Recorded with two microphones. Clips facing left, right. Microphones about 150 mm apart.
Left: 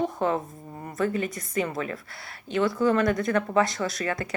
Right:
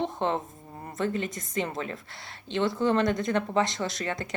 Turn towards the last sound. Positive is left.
turn(degrees=-20)  # may be behind; listen again after turning